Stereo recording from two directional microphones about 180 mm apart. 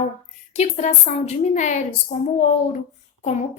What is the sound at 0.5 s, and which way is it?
A woman's voice, 40° left (ahead or behind).